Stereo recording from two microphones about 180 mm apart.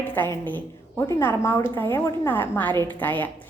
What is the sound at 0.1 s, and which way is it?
A woman's voice, 10° left (ahead or behind).